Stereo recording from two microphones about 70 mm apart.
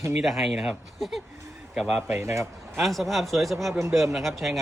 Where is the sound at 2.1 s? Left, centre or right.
Right.